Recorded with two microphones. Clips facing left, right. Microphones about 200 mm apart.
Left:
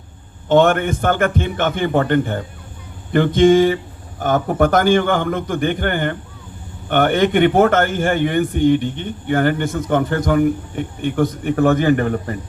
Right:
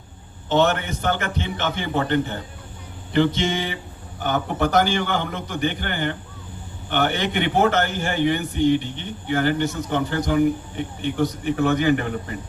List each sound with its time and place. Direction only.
0.4 s a man's voice: 50° left (ahead or behind)